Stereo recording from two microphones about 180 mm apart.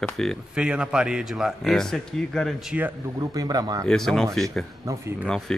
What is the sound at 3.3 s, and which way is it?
Speech, 20° right (ahead or behind).